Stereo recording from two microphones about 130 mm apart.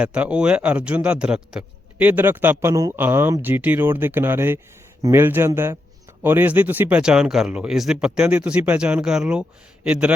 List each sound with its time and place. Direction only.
0.0 s a man's voice: 10° right (ahead or behind)